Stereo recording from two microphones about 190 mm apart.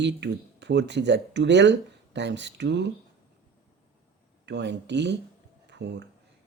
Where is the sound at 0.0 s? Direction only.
65° right (ahead or behind).